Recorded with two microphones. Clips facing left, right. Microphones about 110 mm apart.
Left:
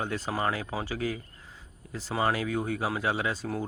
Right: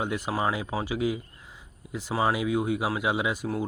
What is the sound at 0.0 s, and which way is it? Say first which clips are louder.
Speech: right 2 dB; 15° right (ahead or behind).